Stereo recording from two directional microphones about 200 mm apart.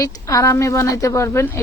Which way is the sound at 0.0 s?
15° left (ahead or behind).